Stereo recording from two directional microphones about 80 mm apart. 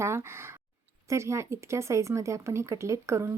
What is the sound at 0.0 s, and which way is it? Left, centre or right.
Speech, right.